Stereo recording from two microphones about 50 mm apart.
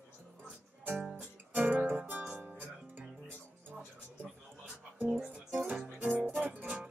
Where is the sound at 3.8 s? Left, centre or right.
Right.